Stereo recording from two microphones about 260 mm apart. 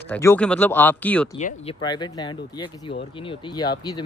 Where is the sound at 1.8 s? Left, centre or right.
Centre.